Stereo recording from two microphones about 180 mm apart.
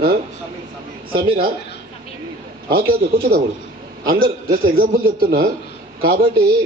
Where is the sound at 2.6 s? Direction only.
55° right (ahead or behind).